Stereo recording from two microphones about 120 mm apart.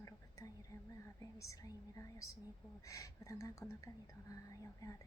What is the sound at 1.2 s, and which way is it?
Speech, 30° left (ahead or behind).